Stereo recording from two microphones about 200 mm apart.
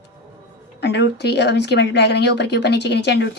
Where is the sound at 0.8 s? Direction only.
55° left (ahead or behind).